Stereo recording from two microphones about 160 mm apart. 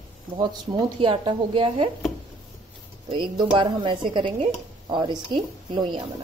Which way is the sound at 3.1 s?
30° right (ahead or behind).